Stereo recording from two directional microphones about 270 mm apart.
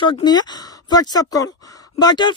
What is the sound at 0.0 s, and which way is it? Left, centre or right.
Speech, centre.